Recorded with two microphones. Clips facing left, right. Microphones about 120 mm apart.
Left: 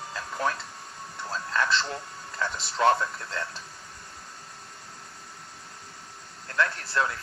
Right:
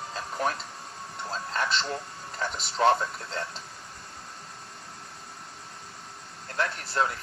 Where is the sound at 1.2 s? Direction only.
30° right (ahead or behind).